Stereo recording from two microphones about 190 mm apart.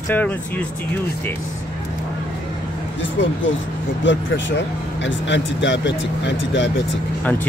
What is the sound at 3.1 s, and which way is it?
Speech, 80° left.